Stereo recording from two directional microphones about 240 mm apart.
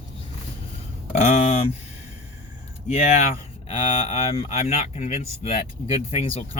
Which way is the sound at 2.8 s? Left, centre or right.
Left.